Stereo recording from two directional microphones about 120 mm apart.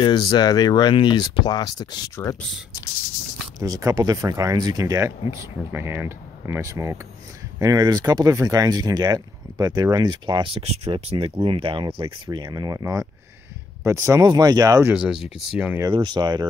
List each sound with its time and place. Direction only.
0.0 s speech: 40° left (ahead or behind)
3.5 s speech: 30° right (ahead or behind)
15.0 s speech: 5° right (ahead or behind)
15.9 s speech: 40° right (ahead or behind)